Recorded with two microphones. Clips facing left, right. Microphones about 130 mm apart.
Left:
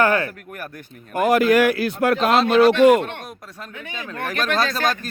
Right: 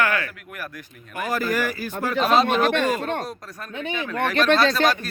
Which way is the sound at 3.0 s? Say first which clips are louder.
Right 6 dB; 40° right (ahead or behind).